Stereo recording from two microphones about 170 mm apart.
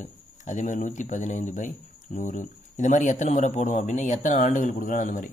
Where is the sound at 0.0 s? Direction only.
45° left (ahead or behind).